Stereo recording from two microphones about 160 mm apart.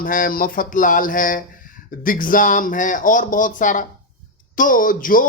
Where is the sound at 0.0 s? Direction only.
60° left (ahead or behind).